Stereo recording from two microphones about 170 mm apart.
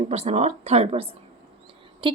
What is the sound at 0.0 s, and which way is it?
A woman's voice, 40° right (ahead or behind).